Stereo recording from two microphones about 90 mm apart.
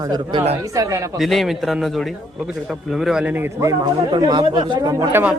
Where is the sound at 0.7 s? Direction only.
35° right (ahead or behind).